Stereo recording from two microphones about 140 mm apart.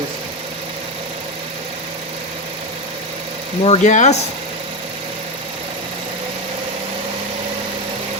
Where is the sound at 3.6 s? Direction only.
55° left (ahead or behind).